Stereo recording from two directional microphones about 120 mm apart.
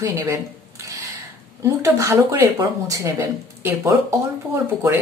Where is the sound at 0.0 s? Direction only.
25° right (ahead or behind).